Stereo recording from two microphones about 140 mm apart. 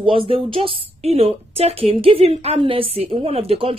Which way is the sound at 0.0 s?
40° right (ahead or behind).